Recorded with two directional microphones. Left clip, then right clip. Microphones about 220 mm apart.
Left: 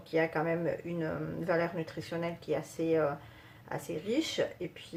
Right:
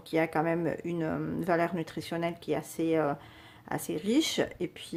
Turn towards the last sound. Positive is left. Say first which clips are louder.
# right 2 dB
turn(degrees=-40)  # may be behind; listen again after turning